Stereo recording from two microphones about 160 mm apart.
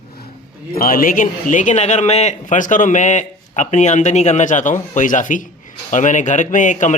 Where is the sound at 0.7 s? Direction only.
65° left (ahead or behind).